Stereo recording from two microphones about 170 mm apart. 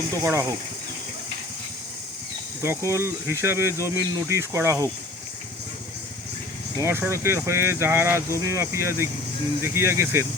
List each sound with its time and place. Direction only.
0.2 s speech: 15° right (ahead or behind)
2.6 s speech: 15° right (ahead or behind)
6.7 s speech: 15° right (ahead or behind)